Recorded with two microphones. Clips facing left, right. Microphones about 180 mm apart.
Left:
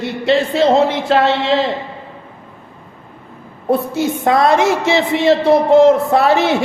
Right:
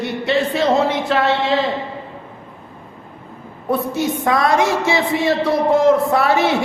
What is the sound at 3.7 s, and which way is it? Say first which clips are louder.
A woman's voice: left 3 dB; 25° left (ahead or behind).